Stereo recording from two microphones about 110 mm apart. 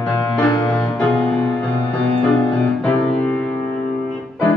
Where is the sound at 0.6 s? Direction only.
10° left (ahead or behind).